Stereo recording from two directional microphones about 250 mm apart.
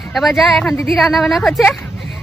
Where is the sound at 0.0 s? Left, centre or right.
Centre.